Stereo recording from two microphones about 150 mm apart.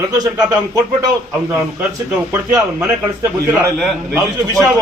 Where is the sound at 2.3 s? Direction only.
15° right (ahead or behind).